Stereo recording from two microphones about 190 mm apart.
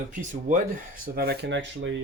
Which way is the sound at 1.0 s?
55° right (ahead or behind).